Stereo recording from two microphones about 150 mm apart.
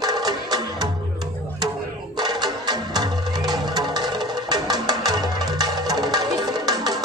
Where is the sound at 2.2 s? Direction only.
25° right (ahead or behind).